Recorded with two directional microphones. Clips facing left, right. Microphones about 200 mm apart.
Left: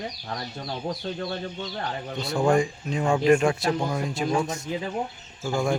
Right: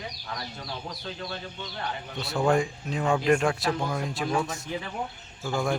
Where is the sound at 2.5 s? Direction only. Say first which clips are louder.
Left 2 dB; centre (ahead or behind).